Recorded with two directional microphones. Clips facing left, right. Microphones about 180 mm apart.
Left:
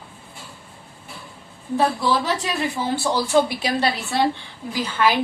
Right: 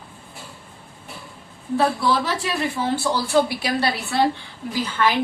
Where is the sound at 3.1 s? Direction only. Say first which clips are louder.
Left 3 dB; 20° left (ahead or behind).